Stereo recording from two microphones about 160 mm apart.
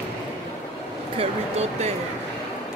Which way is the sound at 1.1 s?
40° right (ahead or behind).